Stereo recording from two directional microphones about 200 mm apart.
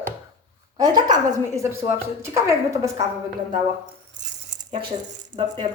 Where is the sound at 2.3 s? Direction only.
15° right (ahead or behind).